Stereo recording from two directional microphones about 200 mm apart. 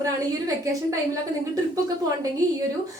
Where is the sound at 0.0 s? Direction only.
15° right (ahead or behind).